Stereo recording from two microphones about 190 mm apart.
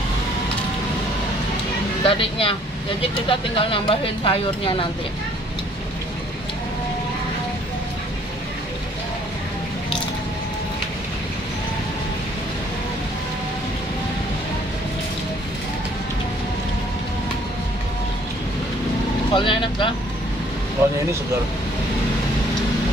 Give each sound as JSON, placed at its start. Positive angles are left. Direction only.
{"t": 2.0, "sound": "speech", "side_deg": 30}
{"t": 19.3, "sound": "speech", "side_deg": 25}